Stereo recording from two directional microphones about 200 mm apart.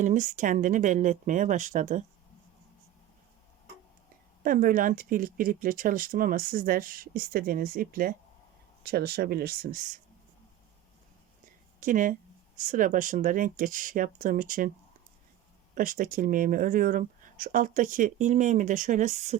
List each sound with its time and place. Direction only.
0.0 s speech: 40° right (ahead or behind)
4.4 s speech: 45° right (ahead or behind)
11.8 s speech: 40° right (ahead or behind)
15.7 s speech: 45° right (ahead or behind)